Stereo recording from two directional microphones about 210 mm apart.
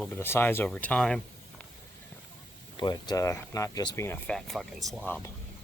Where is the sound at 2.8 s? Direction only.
20° left (ahead or behind).